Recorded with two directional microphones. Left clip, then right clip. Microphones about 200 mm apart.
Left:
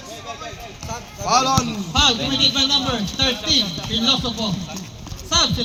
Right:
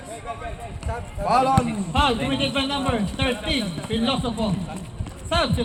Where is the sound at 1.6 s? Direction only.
10° right (ahead or behind).